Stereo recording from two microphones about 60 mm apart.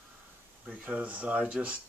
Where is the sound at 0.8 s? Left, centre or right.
Right.